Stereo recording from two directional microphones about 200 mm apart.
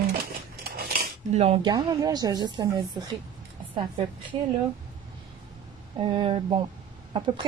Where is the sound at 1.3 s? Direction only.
30° right (ahead or behind).